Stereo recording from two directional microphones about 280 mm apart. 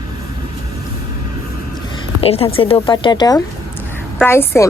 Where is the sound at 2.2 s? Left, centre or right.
Left.